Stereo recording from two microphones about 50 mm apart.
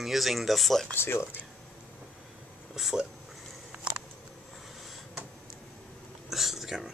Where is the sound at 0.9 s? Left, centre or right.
Left.